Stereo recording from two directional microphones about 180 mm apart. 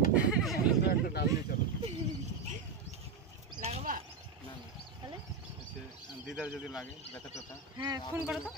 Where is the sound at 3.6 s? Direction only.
35° right (ahead or behind).